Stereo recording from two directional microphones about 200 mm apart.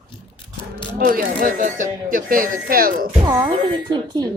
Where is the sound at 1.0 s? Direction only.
45° right (ahead or behind).